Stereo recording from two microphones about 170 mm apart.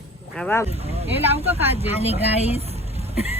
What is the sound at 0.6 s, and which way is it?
Speech, 35° right (ahead or behind).